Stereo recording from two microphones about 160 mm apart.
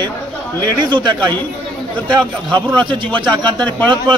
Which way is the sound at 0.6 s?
30° right (ahead or behind).